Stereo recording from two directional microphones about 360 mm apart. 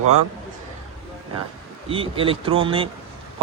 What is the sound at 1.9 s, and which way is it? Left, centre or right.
A man's voice, centre.